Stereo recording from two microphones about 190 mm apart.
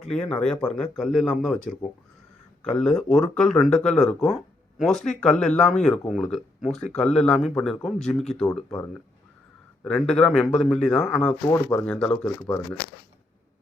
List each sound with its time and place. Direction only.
0.0 s speech: 5° left (ahead or behind)
2.6 s speech: 5° left (ahead or behind)